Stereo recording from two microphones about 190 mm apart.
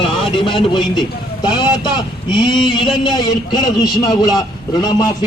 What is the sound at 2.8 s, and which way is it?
Speech, centre (ahead or behind).